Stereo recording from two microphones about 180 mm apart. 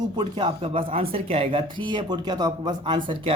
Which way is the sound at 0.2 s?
25° right (ahead or behind).